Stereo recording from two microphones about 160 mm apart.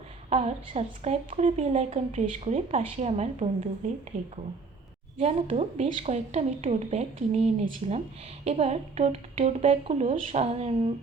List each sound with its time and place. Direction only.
0.3 s a woman's voice: 40° right (ahead or behind)
5.1 s a woman's voice: 35° right (ahead or behind)